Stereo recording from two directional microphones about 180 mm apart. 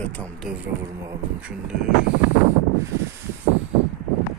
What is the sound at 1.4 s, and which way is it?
Speech, 5° right (ahead or behind).